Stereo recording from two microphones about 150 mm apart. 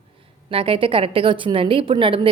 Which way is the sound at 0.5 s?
35° right (ahead or behind).